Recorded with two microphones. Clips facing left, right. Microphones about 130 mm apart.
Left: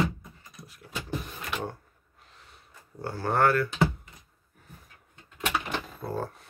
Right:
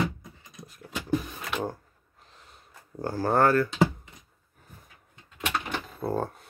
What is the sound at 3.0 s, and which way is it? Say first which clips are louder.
Speech: right 2 dB; 35° right (ahead or behind).